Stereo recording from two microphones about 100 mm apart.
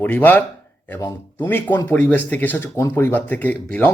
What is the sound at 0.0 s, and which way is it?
Speech, 15° left (ahead or behind).